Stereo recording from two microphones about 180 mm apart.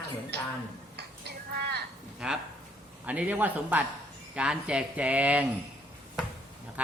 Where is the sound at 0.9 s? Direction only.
65° right (ahead or behind).